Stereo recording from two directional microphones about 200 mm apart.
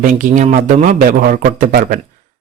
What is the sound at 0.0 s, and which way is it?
Speech, 40° right (ahead or behind).